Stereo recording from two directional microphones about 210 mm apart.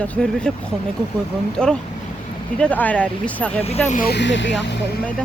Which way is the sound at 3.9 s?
40° left (ahead or behind).